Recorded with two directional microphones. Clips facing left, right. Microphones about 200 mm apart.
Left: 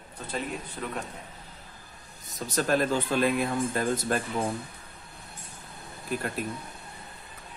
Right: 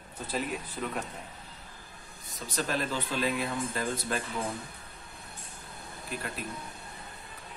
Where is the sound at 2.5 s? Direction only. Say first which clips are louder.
Left 6 dB; 45° left (ahead or behind).